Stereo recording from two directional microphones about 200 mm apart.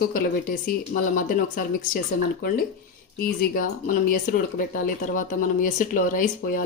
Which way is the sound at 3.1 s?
50° left (ahead or behind).